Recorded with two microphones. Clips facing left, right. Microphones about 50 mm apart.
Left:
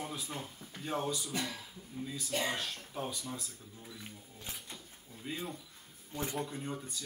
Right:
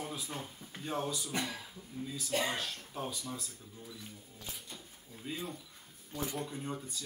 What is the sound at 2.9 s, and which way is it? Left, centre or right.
Speech, centre.